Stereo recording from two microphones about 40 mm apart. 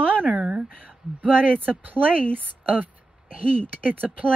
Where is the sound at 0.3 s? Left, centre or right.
Right.